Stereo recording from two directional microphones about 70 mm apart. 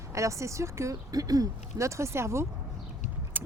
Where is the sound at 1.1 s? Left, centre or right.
Right.